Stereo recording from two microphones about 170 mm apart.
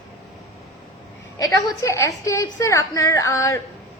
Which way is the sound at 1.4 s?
20° left (ahead or behind).